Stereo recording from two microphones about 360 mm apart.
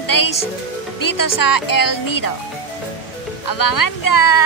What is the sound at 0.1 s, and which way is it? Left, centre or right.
Music, left.